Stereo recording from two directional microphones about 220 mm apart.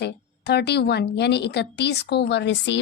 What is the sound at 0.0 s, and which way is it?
Speech, 50° left (ahead or behind).